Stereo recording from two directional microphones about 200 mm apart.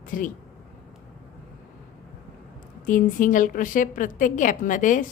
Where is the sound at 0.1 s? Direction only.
40° left (ahead or behind).